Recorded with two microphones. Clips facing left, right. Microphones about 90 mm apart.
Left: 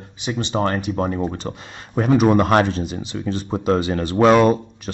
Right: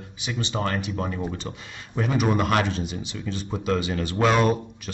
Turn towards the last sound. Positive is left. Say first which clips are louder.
# left 6 dB
turn(degrees=35)  # may be behind; listen again after turning